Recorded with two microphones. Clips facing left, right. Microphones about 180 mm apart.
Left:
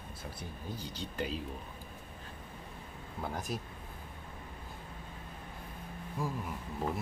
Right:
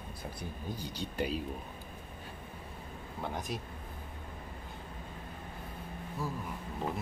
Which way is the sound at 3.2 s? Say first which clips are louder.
Even; centre (ahead or behind).